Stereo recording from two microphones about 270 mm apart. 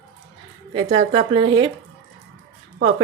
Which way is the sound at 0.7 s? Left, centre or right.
Centre.